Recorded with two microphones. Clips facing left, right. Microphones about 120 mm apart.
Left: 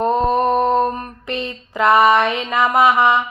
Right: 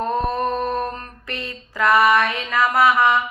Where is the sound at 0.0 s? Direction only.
20° left (ahead or behind).